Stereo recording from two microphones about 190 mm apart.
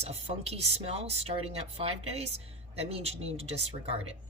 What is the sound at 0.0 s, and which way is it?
Speech, 35° right (ahead or behind).